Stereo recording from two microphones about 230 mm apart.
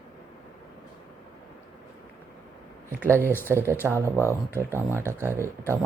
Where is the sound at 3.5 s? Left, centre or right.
Centre.